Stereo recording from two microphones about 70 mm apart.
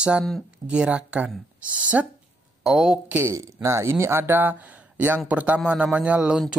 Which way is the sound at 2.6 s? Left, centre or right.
Centre.